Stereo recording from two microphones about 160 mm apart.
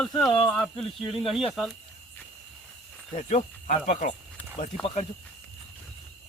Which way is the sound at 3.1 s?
45° left (ahead or behind).